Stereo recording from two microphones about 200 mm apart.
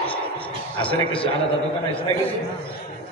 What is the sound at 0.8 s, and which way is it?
Speech, 25° left (ahead or behind).